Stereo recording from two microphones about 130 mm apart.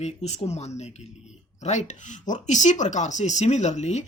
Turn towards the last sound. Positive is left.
turn(degrees=60)  # may be behind; listen again after turning